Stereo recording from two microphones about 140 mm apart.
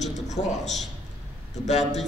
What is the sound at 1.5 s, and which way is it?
Speech, 55° left (ahead or behind).